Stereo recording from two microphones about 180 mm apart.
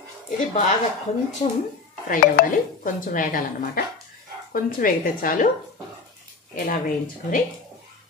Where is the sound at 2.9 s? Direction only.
50° left (ahead or behind).